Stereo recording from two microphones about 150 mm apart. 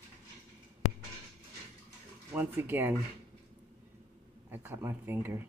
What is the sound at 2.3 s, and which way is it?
Speech, 15° right (ahead or behind).